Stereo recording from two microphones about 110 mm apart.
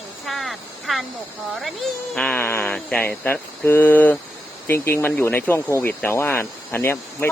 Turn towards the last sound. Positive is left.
turn(degrees=20)  # may be behind; listen again after turning